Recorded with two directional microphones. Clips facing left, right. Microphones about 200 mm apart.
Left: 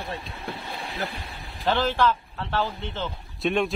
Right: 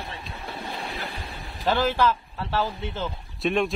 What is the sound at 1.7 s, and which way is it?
Speech, 10° right (ahead or behind).